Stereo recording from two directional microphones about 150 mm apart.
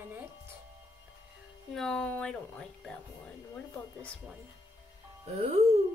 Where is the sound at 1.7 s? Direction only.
5° left (ahead or behind).